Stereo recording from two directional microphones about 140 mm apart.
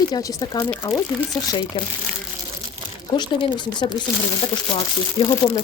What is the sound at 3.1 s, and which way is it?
Speech, 30° left (ahead or behind).